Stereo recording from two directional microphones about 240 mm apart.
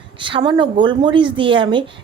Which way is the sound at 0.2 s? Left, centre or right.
Right.